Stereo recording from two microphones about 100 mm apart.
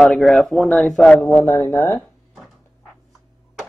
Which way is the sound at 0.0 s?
Centre (ahead or behind).